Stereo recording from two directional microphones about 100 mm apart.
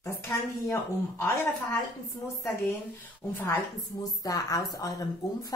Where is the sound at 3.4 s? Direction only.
35° left (ahead or behind).